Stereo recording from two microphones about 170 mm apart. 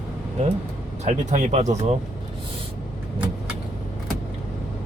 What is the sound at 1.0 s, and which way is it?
Speech, 45° right (ahead or behind).